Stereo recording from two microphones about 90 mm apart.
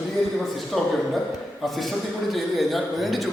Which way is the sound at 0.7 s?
Centre (ahead or behind).